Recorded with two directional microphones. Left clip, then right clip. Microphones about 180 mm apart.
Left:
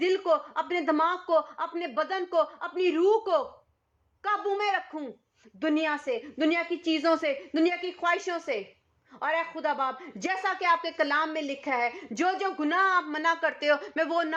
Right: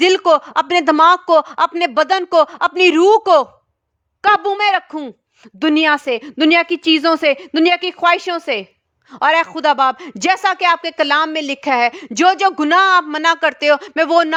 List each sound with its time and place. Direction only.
0.0 s a woman's voice: 55° right (ahead or behind)
5.5 s a woman's voice: 65° right (ahead or behind); by 14.3 s 50° right (ahead or behind)